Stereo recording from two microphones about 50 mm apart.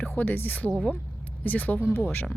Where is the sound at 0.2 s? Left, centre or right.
Left.